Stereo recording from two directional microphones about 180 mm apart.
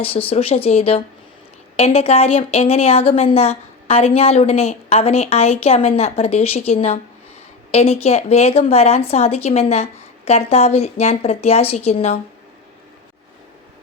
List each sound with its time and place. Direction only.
0.0 s speech: 30° left (ahead or behind)